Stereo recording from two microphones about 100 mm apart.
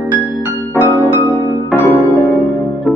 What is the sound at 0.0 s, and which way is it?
Music, 15° right (ahead or behind).